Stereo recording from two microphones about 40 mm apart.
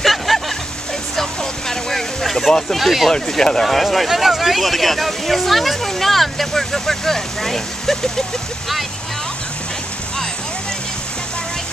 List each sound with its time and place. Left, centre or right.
0.0 s a sound: centre
1.1 s vehicle: centre
2.8 s speech: centre
3.1 s speech: centre
3.6 s speech: centre